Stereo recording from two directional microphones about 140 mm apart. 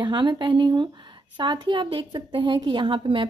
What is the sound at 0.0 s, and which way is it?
A woman's voice, 35° right (ahead or behind).